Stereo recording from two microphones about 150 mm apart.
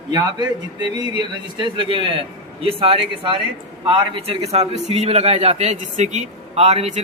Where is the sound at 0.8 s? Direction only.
30° right (ahead or behind).